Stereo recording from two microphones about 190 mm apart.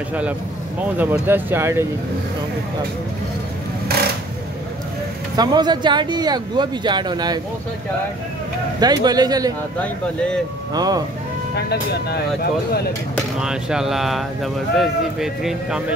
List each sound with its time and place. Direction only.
0.9 s speech: 10° right (ahead or behind)
5.3 s speech: 20° right (ahead or behind)
8.7 s speech: 20° right (ahead or behind)
9.8 s speech: 5° left (ahead or behind)
10.7 s speech: 20° right (ahead or behind)
11.5 s speech: 60° left (ahead or behind)
13.4 s speech: 5° right (ahead or behind)